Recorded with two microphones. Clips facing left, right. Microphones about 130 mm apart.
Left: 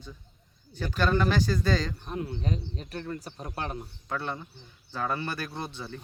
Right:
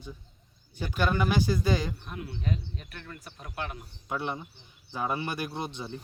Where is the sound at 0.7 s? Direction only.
15° right (ahead or behind).